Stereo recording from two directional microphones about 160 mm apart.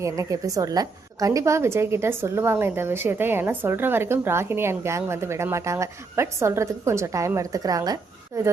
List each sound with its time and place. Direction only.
0.0 s a woman's voice: 20° right (ahead or behind)